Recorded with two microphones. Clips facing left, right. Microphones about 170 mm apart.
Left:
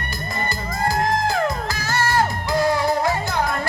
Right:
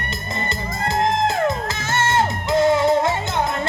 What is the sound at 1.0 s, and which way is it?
Music, 20° right (ahead or behind).